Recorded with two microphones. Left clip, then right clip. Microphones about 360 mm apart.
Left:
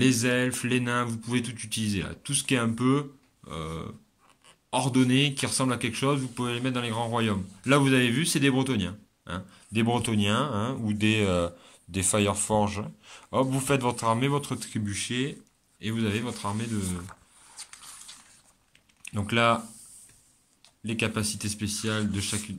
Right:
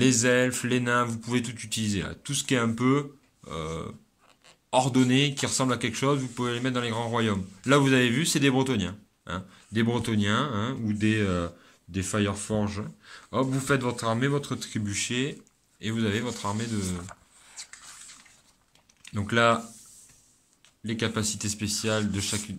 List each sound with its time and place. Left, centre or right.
0.0 s speech: centre
17.6 s a sound: centre
19.0 s speech: centre
20.8 s speech: centre